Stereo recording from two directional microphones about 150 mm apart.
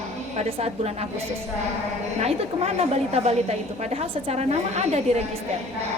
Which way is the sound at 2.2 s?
45° right (ahead or behind).